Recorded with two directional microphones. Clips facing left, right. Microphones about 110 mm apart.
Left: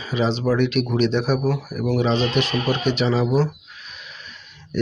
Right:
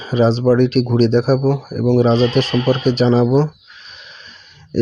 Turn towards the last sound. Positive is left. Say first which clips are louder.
# right 6 dB
turn(degrees=-35)  # may be behind; listen again after turning